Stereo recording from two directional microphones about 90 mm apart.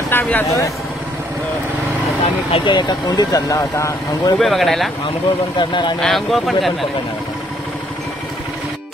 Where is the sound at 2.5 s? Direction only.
60° left (ahead or behind); by 3.9 s 35° left (ahead or behind).